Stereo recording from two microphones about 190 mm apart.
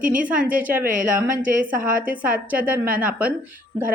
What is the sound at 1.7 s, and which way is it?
Speech, 45° right (ahead or behind).